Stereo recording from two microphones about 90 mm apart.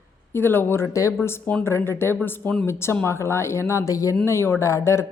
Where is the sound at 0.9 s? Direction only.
35° left (ahead or behind).